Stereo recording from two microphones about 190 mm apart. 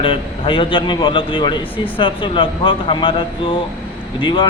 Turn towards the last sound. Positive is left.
turn(degrees=25)  # may be behind; listen again after turning